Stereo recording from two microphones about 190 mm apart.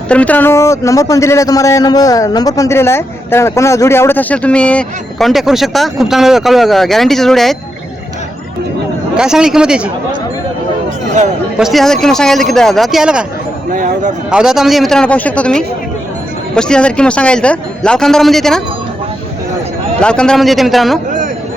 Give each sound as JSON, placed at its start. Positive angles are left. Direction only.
{"t": 0.1, "sound": "a man's voice", "side_deg": 5}
{"t": 9.1, "sound": "a man's voice", "side_deg": -5}
{"t": 11.5, "sound": "a man's voice", "side_deg": 0}
{"t": 13.7, "sound": "speech", "side_deg": -45}
{"t": 14.3, "sound": "a man's voice", "side_deg": -5}
{"t": 20.0, "sound": "a man's voice", "side_deg": 5}